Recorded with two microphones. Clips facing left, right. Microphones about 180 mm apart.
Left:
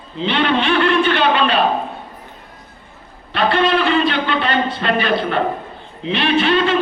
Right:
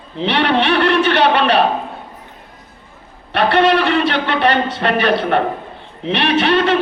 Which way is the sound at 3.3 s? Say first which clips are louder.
Right 3 dB; 65° right (ahead or behind).